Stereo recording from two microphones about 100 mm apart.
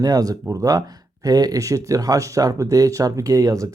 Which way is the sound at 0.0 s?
35° right (ahead or behind).